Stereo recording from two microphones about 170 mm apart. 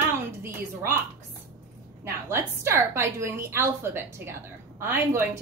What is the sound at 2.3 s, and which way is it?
A woman's voice, 15° right (ahead or behind).